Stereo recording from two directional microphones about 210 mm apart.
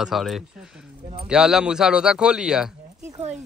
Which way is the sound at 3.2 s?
30° right (ahead or behind).